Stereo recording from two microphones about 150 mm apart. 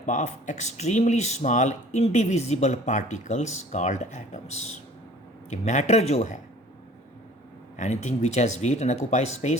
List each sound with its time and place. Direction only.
0.0 s speech: 55° left (ahead or behind)
7.8 s speech: 50° left (ahead or behind)